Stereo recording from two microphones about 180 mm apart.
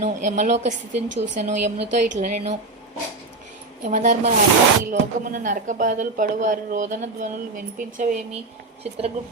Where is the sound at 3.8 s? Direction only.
45° right (ahead or behind).